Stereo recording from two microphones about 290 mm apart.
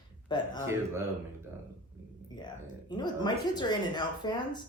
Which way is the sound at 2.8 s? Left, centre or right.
Centre.